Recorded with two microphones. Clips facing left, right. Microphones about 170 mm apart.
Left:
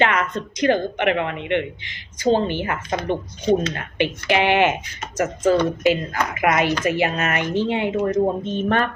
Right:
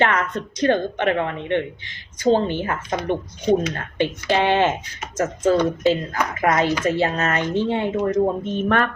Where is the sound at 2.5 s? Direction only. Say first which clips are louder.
Even; 65° left (ahead or behind).